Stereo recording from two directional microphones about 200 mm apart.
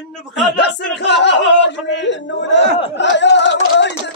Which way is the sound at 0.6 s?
60° left (ahead or behind).